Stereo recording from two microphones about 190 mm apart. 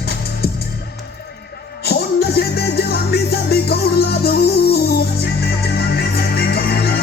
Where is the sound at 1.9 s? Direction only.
55° left (ahead or behind).